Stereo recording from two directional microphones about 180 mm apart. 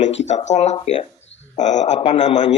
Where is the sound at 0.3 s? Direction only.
40° left (ahead or behind).